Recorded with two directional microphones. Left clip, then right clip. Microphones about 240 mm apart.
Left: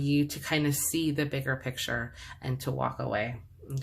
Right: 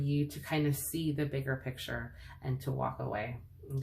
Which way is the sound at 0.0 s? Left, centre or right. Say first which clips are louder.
Left 7 dB; left.